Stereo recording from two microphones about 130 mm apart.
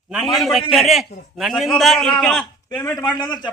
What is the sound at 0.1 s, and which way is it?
A man's voice, 5° right (ahead or behind).